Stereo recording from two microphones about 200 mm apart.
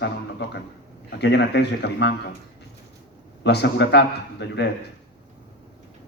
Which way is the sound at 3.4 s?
60° left (ahead or behind).